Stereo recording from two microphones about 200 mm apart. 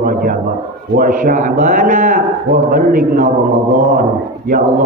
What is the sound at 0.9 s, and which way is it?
A man's voice, 45° right (ahead or behind).